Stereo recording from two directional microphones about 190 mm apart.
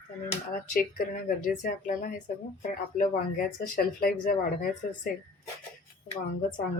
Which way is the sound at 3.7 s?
50° left (ahead or behind).